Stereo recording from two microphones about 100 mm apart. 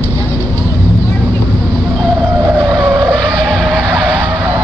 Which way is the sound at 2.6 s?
50° right (ahead or behind).